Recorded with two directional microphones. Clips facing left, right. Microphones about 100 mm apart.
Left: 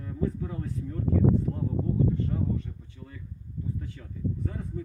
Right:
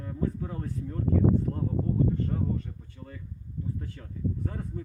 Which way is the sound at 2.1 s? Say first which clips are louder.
Even; 45° right (ahead or behind).